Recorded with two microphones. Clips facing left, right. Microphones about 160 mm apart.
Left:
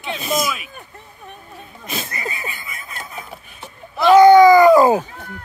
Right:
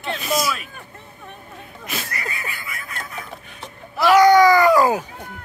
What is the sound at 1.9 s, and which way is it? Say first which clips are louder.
Vehicle: left 2 dB; 20° left (ahead or behind).